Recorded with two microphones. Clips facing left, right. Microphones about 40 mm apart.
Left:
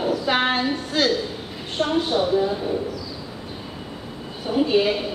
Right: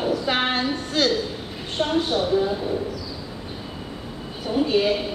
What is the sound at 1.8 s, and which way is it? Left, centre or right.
Speech, centre.